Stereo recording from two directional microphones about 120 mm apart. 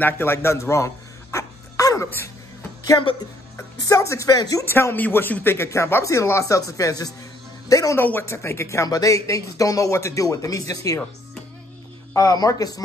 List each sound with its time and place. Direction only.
0.0 s a sound: 20° left (ahead or behind)
2.0 s throat clearing: 20° left (ahead or behind)
3.0 s speech: 45° left (ahead or behind)
3.5 s speech: 25° left (ahead or behind)
4.6 s speech: 20° left (ahead or behind)
8.0 s speech: 15° left (ahead or behind)
12.1 s speech: 30° left (ahead or behind)